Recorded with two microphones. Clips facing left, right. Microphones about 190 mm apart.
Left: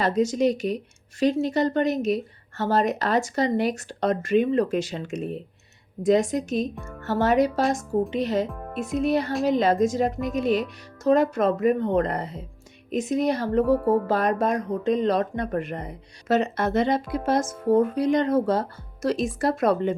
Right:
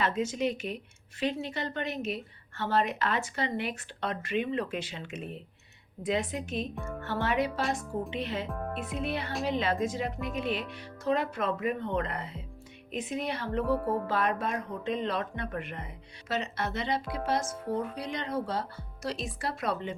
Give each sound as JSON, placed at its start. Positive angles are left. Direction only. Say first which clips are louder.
{"t": 0.0, "sound": "a woman's voice", "louder": "left 8 dB", "side_deg": 40}